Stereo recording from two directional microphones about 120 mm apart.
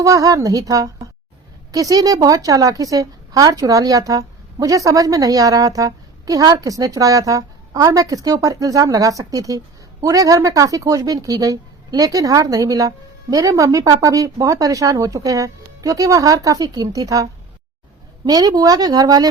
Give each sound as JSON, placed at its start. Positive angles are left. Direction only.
{"t": 0.0, "sound": "a woman's voice", "side_deg": -30}
{"t": 18.3, "sound": "speech", "side_deg": -35}